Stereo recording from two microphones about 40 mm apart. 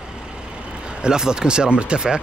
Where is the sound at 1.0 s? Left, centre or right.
Centre.